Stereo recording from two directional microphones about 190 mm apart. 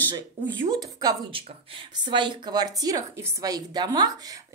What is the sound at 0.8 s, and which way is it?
Speech, 20° right (ahead or behind).